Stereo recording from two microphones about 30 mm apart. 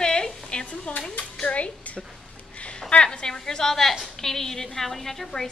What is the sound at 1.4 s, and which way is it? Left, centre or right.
Speech, left.